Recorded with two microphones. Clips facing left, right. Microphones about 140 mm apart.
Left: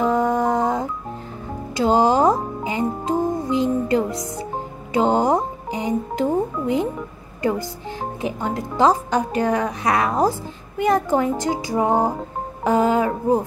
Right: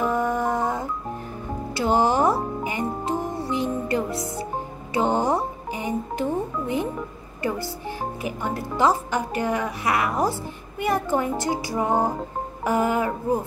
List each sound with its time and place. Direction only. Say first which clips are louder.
0.0 s music: left 4 dB; 20° left (ahead or behind)
4.9 s speech: left 4 dB; 15° left (ahead or behind)